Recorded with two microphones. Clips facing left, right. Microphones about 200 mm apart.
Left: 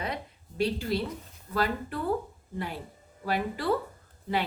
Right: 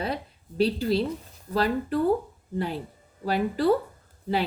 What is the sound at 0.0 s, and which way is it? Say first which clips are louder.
A woman's voice: right 4 dB; 35° right (ahead or behind).